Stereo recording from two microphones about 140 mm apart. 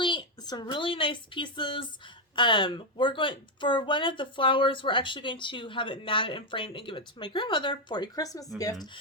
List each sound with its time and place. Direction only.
0.0 s a woman's voice: 35° left (ahead or behind)